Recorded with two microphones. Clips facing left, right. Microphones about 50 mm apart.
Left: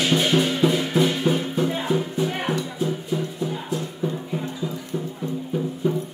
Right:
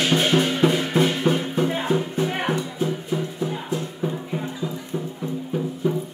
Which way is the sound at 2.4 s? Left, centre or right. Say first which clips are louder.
Right 1 dB; right.